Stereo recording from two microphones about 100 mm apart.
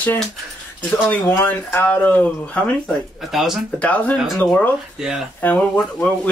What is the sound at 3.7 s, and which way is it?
Speech, 15° left (ahead or behind).